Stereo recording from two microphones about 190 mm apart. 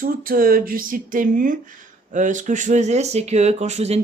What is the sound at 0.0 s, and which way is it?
Speech, 50° right (ahead or behind).